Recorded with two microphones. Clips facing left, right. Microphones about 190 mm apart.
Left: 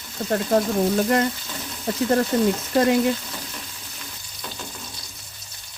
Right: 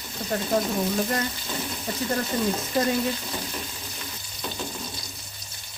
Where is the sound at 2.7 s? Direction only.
70° left (ahead or behind).